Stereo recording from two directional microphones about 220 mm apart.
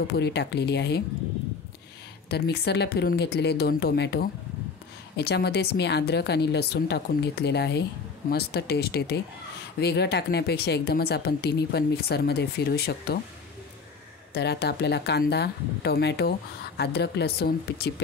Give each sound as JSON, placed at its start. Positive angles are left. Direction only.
{"t": 0.1, "sound": "speech", "side_deg": 50}
{"t": 2.2, "sound": "speech", "side_deg": 45}
{"t": 14.3, "sound": "speech", "side_deg": 50}